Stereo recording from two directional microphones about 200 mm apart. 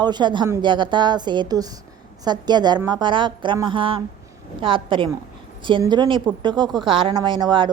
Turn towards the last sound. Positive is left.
turn(degrees=-20)  # may be behind; listen again after turning